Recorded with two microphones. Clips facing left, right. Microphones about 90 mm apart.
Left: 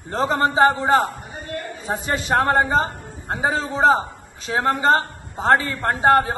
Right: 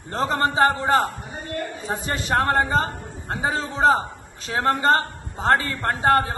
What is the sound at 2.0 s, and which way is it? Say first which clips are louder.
A man's voice: left 2 dB; 35° left (ahead or behind).